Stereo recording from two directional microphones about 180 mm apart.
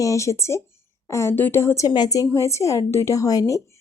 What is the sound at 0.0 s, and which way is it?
A woman's voice, 15° left (ahead or behind).